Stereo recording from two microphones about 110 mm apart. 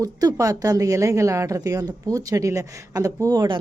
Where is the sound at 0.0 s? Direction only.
35° right (ahead or behind).